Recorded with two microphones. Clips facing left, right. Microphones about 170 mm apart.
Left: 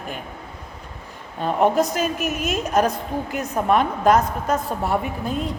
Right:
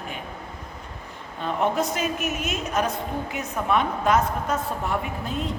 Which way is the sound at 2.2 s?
Centre (ahead or behind).